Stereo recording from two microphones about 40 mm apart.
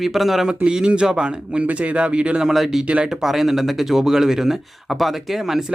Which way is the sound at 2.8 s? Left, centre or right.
Right.